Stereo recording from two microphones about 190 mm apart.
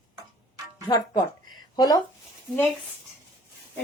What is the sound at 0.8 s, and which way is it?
Speech, 20° left (ahead or behind).